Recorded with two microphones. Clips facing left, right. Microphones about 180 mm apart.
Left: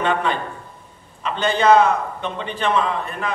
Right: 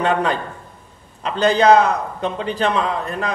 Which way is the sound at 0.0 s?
40° right (ahead or behind).